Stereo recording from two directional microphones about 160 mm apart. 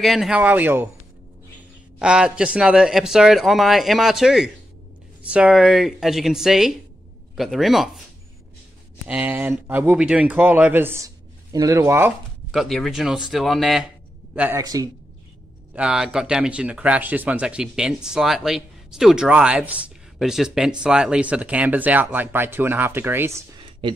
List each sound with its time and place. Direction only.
0.0 s speech: centre (ahead or behind)
2.0 s a man's voice: 5° right (ahead or behind)
9.0 s speech: 10° right (ahead or behind)
12.4 s a man's voice: centre (ahead or behind)
14.6 s speech: 20° right (ahead or behind)
15.7 s speech: 5° right (ahead or behind)